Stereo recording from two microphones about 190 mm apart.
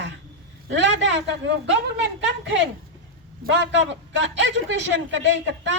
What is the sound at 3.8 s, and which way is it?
A woman's voice, 70° right (ahead or behind).